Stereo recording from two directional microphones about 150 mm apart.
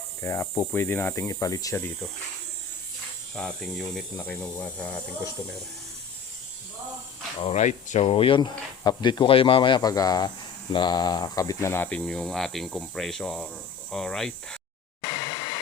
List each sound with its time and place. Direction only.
0.2 s speech: 20° left (ahead or behind)
1.3 s speech: 20° left (ahead or behind)
3.3 s speech: 5° left (ahead or behind)
7.3 s speech: 45° left (ahead or behind)
8.4 s speech: 25° left (ahead or behind); by 14.3 s 5° left (ahead or behind)
15.0 s a sound: 30° left (ahead or behind)